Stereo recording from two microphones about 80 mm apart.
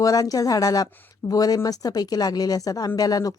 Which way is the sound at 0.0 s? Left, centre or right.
Left.